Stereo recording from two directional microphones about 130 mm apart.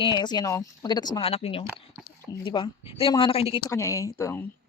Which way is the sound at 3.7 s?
25° left (ahead or behind).